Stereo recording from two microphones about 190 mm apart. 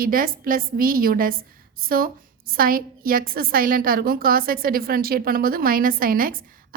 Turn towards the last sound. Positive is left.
turn(degrees=-50)  # may be behind; listen again after turning